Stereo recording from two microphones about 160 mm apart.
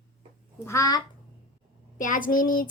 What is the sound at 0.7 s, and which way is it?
Speech, 20° left (ahead or behind).